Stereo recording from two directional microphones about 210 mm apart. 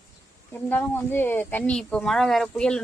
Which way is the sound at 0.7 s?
10° left (ahead or behind).